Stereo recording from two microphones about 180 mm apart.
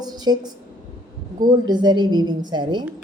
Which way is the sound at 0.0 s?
20° right (ahead or behind).